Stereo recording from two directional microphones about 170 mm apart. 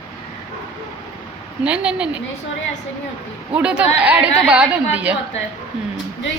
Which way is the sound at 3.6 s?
5° right (ahead or behind).